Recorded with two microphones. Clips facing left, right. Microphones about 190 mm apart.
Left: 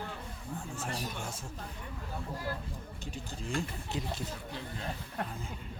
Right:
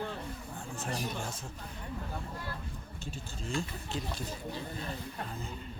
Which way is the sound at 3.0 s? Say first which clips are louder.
Even; 15° left (ahead or behind).